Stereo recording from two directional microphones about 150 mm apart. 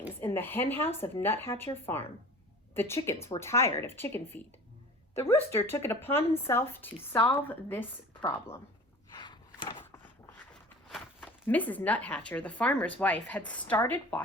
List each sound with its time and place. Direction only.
0.2 s speech: 15° left (ahead or behind)
9.1 s walk: 30° left (ahead or behind)
10.5 s a sound: 5° left (ahead or behind)
11.4 s speech: 10° left (ahead or behind)